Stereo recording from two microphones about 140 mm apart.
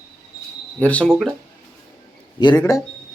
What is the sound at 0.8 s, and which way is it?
Speech, 10° left (ahead or behind).